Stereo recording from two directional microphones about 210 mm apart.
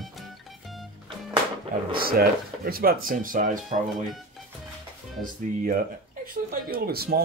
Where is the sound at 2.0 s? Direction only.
45° right (ahead or behind).